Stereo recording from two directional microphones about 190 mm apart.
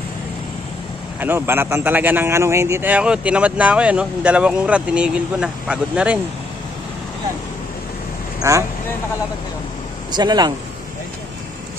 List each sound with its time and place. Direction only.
1.2 s a man's voice: 10° right (ahead or behind)
8.4 s speech: 15° right (ahead or behind)
10.1 s speech: 20° right (ahead or behind)